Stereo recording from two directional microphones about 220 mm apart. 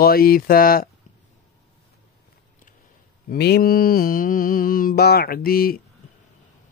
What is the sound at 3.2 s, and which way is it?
Speech, 45° left (ahead or behind).